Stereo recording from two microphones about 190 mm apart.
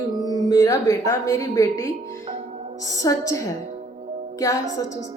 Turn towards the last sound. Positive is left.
turn(degrees=15)  # may be behind; listen again after turning